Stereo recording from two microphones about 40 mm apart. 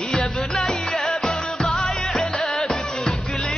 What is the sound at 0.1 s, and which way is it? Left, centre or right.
Music, centre.